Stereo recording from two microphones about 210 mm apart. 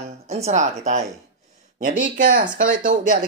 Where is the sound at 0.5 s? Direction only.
35° right (ahead or behind).